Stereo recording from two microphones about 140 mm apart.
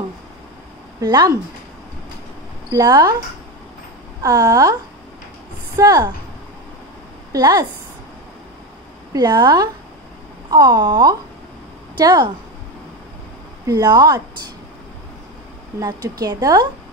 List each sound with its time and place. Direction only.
1.0 s a woman's voice: 30° right (ahead or behind)
2.7 s a woman's voice: 25° right (ahead or behind)
4.2 s a woman's voice: 25° right (ahead or behind)
5.8 s a woman's voice: 25° right (ahead or behind)
7.3 s a woman's voice: 25° right (ahead or behind)
9.1 s a woman's voice: 30° right (ahead or behind)
13.7 s a woman's voice: 25° right (ahead or behind)
15.8 s a woman's voice: 25° right (ahead or behind)